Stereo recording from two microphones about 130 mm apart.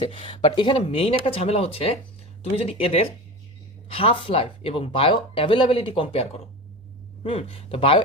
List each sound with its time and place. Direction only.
0.0 s speech: 45° left (ahead or behind)